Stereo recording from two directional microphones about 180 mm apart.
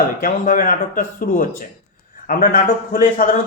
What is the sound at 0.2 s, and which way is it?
A man's voice, 50° left (ahead or behind).